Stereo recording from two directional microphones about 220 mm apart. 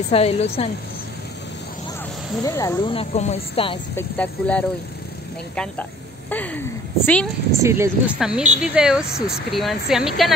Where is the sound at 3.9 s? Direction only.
5° left (ahead or behind).